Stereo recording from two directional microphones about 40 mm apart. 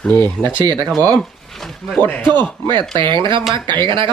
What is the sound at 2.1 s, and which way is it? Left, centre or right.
Speech, centre.